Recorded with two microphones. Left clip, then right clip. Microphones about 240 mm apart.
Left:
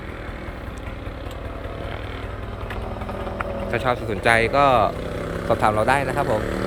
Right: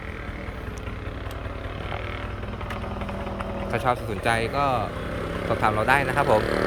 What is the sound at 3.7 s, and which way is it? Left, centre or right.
Speech, centre.